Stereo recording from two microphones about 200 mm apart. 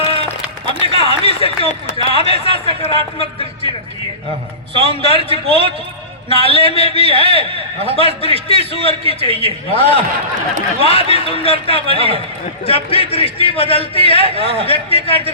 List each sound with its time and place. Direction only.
0.9 s a sound: 30° left (ahead or behind)
2.0 s a man's voice: 30° left (ahead or behind)
4.8 s a man's voice: 30° left (ahead or behind)